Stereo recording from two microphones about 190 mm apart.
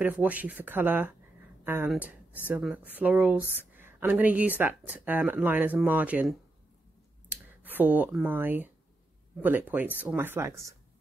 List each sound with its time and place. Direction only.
0.0 s speech: 10° right (ahead or behind)
7.6 s speech: 10° right (ahead or behind)